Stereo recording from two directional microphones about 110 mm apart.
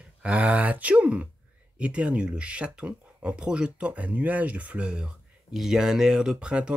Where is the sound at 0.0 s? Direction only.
10° right (ahead or behind).